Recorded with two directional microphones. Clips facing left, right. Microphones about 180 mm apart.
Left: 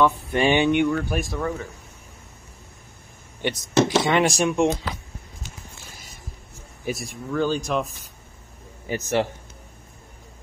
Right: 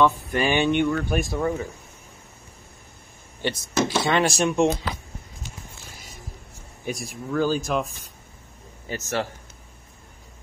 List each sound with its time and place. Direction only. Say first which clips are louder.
0.3 s a sound: left 3 dB; 25° left (ahead or behind)
0.7 s speech: left 1 dB; 10° left (ahead or behind)
1.4 s speech: right 3 dB; 15° right (ahead or behind)
3.4 s speech: left 4 dB; 15° left (ahead or behind)
6.9 s speech: left 1 dB; centre (ahead or behind)
8.8 s speech: left 4 dB; 15° left (ahead or behind)